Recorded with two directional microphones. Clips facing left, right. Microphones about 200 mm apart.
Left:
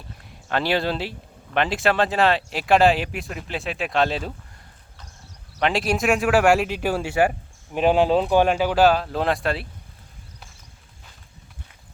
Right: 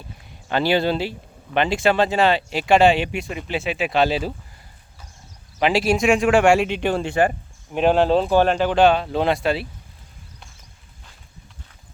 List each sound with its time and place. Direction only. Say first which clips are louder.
0.3 s speech: right 3 dB; centre (ahead or behind)
5.5 s speech: right 3 dB; centre (ahead or behind)